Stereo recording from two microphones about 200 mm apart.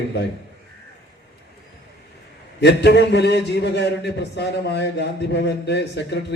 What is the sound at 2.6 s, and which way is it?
A man's voice, 60° left (ahead or behind).